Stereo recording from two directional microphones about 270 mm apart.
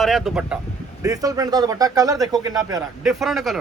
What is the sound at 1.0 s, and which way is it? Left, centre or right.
Speech, centre.